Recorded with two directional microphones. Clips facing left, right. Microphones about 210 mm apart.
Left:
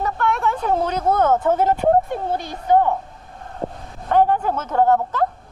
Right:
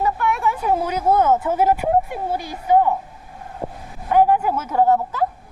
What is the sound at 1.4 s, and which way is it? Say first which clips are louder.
Speech: left 1 dB; 10° right (ahead or behind).